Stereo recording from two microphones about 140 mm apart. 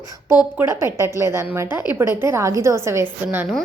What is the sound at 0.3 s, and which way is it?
A woman's voice, 15° right (ahead or behind).